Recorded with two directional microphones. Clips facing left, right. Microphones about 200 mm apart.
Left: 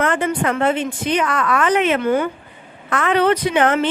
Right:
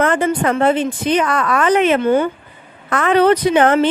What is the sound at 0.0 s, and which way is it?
A woman's voice, 35° right (ahead or behind).